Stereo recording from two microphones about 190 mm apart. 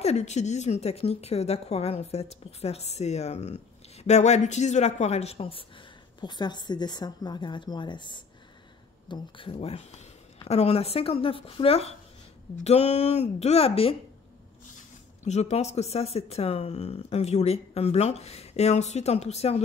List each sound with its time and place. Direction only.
0.0 s a woman's voice: 35° left (ahead or behind)
15.2 s speech: 35° left (ahead or behind)